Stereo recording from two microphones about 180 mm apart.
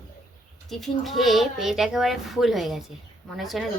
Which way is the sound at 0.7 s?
Centre (ahead or behind).